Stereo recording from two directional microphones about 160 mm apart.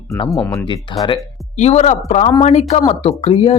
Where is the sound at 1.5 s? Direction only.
45° left (ahead or behind).